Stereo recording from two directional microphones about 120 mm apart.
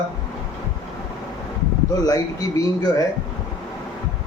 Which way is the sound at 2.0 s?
30° left (ahead or behind).